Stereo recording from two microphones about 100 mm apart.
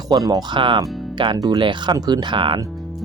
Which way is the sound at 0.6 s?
55° right (ahead or behind).